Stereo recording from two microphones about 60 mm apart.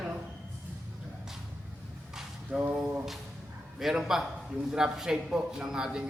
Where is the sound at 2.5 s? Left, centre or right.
Right.